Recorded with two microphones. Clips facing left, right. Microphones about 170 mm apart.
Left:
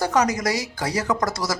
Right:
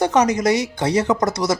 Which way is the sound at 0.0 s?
20° right (ahead or behind).